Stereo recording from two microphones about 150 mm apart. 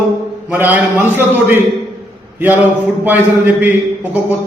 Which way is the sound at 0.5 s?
15° right (ahead or behind).